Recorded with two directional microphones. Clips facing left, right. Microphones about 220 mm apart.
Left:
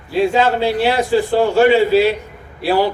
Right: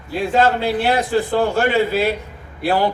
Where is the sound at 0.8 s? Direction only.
50° right (ahead or behind).